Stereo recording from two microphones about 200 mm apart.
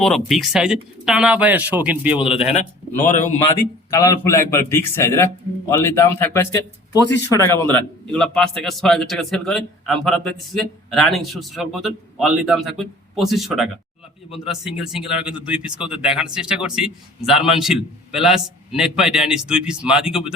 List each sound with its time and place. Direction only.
0.0 s a man's voice: centre (ahead or behind)
2.2 s speech: 30° left (ahead or behind)
3.9 s a man's voice: 15° left (ahead or behind); by 20.3 s 5° right (ahead or behind)